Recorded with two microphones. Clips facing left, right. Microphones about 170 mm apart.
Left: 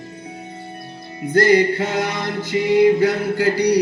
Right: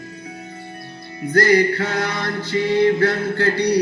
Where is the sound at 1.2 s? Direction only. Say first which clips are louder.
Left 1 dB; 25° left (ahead or behind).